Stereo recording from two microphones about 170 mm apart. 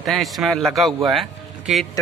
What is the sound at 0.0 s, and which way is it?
Speech, centre (ahead or behind).